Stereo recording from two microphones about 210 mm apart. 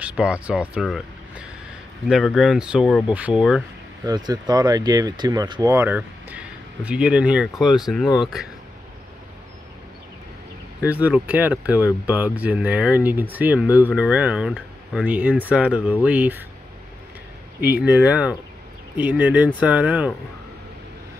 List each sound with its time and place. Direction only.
0.0 s speech: 5° right (ahead or behind)
4.0 s speech: 20° right (ahead or behind); by 8.5 s centre (ahead or behind)
10.8 s speech: 5° right (ahead or behind)
17.6 s speech: 5° right (ahead or behind)